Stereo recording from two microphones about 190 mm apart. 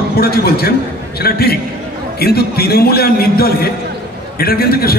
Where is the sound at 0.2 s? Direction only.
55° left (ahead or behind).